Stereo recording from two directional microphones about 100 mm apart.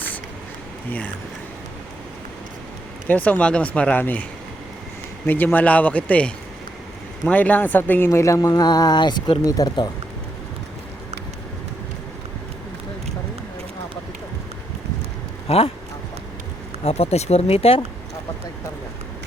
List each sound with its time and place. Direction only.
0.9 s speech: 15° left (ahead or behind)
3.1 s speech: 15° left (ahead or behind); by 9.3 s 45° left (ahead or behind)
9.4 s speech: 35° left (ahead or behind)
15.4 s speech: 75° left (ahead or behind)
16.8 s speech: 90° left; by 17.8 s 75° left (ahead or behind)